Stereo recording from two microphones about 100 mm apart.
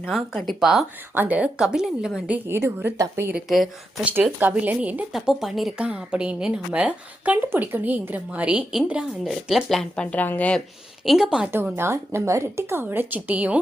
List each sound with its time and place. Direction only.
0.1 s speech: centre (ahead or behind)
1.1 s a woman's voice: 15° right (ahead or behind)
2.5 s a woman's voice: 25° right (ahead or behind)
3.3 s speech: centre (ahead or behind)
4.0 s a woman's voice: 20° right (ahead or behind)
5.1 s a woman's voice: 5° right (ahead or behind)
9.9 s speech: 10° left (ahead or behind)
11.0 s a woman's voice: 5° right (ahead or behind)
11.5 s a woman's voice: 25° right (ahead or behind)